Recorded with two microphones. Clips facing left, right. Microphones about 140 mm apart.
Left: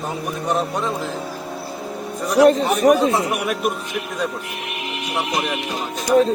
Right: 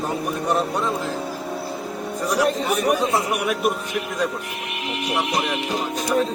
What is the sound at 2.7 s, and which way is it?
Speech, 35° left (ahead or behind).